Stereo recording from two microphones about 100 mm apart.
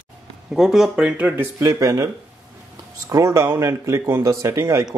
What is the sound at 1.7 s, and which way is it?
Speech, 35° right (ahead or behind).